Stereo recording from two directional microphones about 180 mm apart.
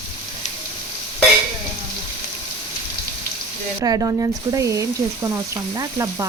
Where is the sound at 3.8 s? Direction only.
20° right (ahead or behind).